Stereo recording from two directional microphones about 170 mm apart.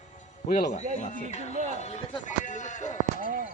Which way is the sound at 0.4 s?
50° left (ahead or behind).